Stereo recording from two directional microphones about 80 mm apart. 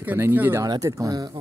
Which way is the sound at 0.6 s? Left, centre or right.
Right.